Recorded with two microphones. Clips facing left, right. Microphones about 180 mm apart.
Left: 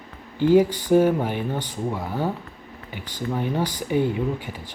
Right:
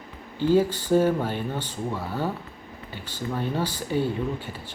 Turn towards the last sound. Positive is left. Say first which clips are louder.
# left 3 dB
turn(degrees=15)  # may be behind; listen again after turning